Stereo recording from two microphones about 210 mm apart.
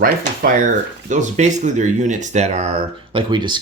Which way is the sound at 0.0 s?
40° right (ahead or behind).